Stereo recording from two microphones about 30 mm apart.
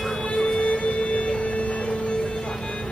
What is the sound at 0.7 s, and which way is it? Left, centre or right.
Music, left.